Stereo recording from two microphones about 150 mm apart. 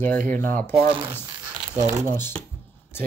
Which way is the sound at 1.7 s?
25° right (ahead or behind).